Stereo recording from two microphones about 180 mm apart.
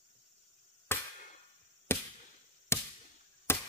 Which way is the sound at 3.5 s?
10° left (ahead or behind).